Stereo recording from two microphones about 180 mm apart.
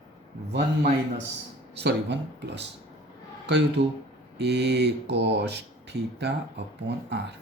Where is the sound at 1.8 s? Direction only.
75° right (ahead or behind).